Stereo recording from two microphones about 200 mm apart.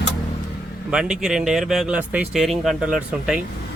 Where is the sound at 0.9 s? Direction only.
5° right (ahead or behind).